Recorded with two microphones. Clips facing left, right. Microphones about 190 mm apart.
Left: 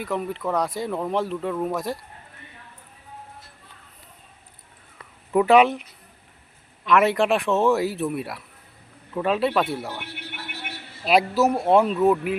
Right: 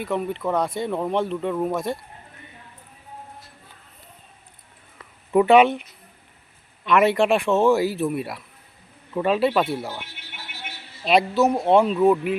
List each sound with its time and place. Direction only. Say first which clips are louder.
0.0 s speech: right 2 dB; centre (ahead or behind)
5.3 s speech: right 1 dB; centre (ahead or behind)
6.8 s speech: right 1 dB; centre (ahead or behind)
10.0 s a sound: left 4 dB; 60° left (ahead or behind)
11.0 s speech: right 1 dB; 5° left (ahead or behind)